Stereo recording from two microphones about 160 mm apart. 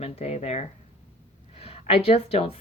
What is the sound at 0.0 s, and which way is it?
Speech, 40° left (ahead or behind).